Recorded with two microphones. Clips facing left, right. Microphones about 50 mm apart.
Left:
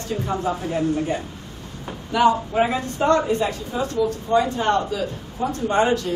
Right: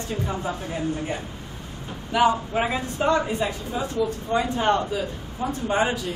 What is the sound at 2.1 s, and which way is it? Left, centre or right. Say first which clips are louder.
Speech: left 3 dB; centre.